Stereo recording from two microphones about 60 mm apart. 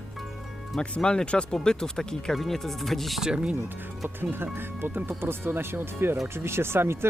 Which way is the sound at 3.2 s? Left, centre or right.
Centre.